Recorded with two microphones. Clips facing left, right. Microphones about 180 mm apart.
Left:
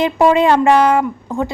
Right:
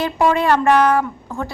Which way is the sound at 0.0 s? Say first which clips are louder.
Left 5 dB; 20° left (ahead or behind).